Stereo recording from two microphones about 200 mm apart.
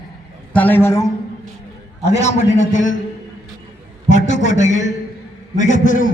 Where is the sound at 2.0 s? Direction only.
35° left (ahead or behind).